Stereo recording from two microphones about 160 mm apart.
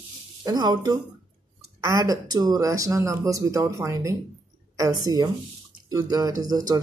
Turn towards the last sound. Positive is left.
turn(degrees=-25)  # may be behind; listen again after turning